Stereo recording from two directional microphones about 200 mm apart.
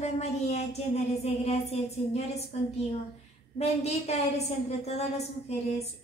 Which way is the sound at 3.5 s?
30° left (ahead or behind).